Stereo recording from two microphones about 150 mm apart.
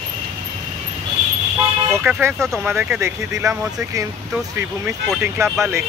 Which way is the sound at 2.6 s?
15° right (ahead or behind).